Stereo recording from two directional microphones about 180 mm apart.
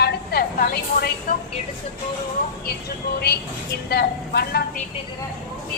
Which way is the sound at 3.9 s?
60° left (ahead or behind).